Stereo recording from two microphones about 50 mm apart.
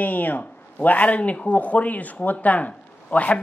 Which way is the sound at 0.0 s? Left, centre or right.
Left.